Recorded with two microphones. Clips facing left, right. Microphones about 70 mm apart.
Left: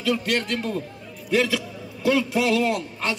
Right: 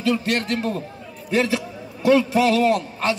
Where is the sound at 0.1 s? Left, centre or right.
Right.